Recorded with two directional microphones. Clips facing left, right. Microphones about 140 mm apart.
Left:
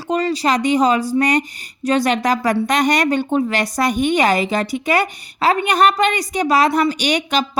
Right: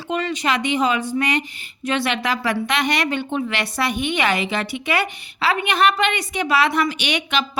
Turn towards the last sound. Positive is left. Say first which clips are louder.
# left 4 dB
turn(degrees=40)  # may be behind; listen again after turning